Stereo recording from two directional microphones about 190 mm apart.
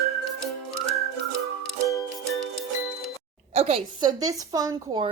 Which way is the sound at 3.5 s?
35° right (ahead or behind).